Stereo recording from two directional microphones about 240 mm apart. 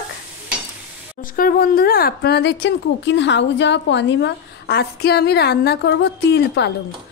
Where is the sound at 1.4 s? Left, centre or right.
Left.